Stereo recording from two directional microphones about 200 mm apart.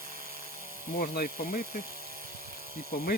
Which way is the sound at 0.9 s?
50° left (ahead or behind).